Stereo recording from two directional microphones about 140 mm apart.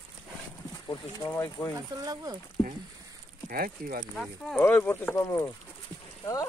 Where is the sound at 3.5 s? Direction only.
90° right.